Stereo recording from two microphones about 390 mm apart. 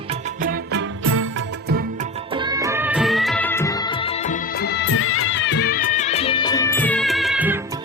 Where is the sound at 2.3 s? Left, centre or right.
Centre.